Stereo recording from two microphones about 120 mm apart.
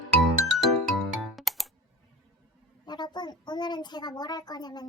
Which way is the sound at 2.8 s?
35° left (ahead or behind).